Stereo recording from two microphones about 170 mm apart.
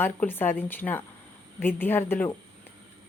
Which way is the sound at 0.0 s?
10° left (ahead or behind).